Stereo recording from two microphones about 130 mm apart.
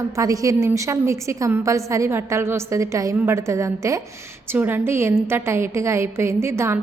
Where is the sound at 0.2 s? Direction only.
25° right (ahead or behind).